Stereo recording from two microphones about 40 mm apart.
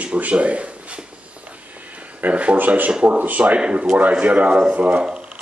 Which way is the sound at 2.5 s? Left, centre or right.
Right.